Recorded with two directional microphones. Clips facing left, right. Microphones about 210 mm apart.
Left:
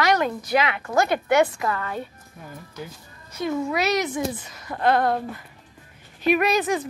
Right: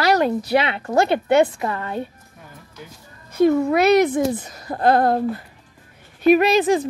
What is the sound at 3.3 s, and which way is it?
A woman's voice, 60° right (ahead or behind).